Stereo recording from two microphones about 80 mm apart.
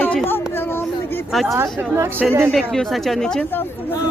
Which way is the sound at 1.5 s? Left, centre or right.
Right.